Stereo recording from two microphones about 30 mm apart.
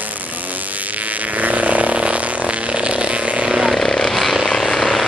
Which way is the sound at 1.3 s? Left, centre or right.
Right.